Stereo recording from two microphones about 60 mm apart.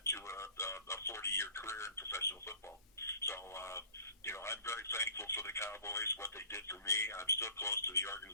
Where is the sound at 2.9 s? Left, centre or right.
Left.